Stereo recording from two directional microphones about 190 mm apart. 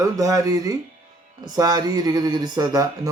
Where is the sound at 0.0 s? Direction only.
15° right (ahead or behind).